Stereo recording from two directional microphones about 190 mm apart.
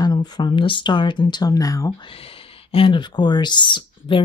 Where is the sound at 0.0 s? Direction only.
20° left (ahead or behind).